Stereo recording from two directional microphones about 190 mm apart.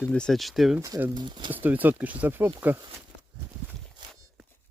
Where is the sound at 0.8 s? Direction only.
15° right (ahead or behind).